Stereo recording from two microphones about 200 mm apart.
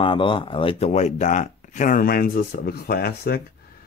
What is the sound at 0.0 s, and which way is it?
Speech, 25° left (ahead or behind).